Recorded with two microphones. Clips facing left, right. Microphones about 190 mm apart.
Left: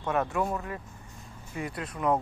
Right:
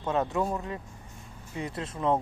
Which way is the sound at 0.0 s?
20° right (ahead or behind).